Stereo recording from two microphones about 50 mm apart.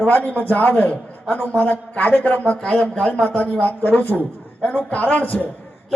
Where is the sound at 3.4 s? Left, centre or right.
Left.